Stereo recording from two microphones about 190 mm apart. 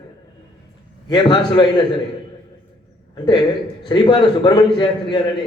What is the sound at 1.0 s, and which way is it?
Speech, 25° left (ahead or behind).